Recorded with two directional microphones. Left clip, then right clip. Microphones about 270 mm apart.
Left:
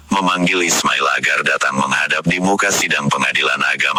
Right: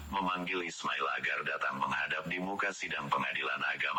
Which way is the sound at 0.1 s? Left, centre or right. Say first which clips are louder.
Left 18 dB; left.